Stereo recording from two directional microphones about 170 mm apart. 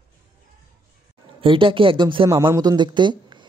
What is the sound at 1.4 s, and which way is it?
Speech, 30° right (ahead or behind).